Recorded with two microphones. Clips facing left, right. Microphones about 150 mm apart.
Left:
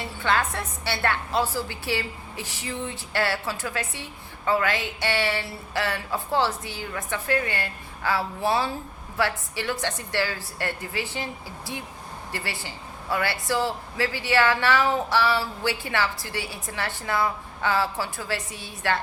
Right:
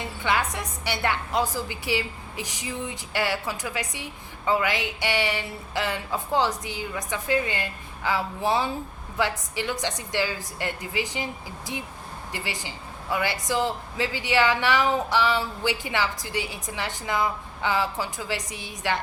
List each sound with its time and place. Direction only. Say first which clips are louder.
0.0 s a woman's voice: left 1 dB; 15° right (ahead or behind)